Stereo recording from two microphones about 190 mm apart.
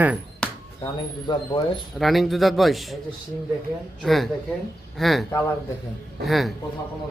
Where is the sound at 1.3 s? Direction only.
25° left (ahead or behind).